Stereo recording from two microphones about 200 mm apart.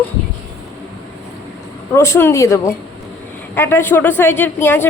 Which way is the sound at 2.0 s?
10° left (ahead or behind).